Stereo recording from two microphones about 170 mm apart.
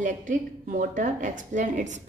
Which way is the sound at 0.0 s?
50° right (ahead or behind).